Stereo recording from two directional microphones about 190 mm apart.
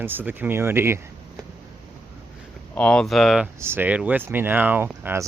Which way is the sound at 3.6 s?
10° right (ahead or behind).